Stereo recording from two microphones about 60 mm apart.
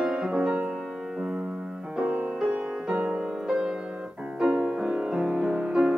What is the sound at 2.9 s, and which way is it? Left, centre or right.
Music, centre.